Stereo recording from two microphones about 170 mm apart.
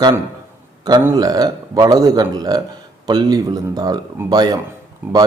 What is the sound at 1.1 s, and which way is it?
Speech, 25° right (ahead or behind).